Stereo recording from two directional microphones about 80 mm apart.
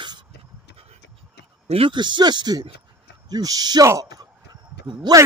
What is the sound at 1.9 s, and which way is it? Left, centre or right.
A man's voice, right.